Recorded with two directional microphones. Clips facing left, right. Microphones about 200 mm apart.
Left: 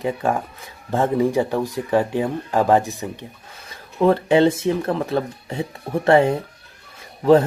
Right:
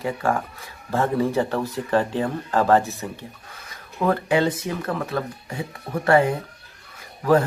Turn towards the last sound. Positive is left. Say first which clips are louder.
# left 4 dB
turn(degrees=25)  # may be behind; listen again after turning